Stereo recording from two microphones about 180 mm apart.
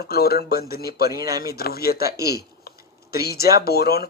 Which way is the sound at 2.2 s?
60° left (ahead or behind).